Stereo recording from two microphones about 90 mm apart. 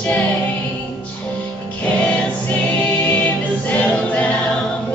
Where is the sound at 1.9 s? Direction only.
10° left (ahead or behind).